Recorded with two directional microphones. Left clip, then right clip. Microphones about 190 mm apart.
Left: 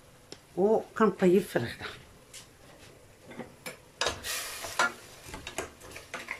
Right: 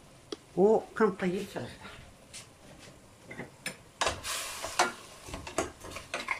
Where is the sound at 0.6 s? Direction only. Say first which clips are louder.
Right 1 dB; centre (ahead or behind).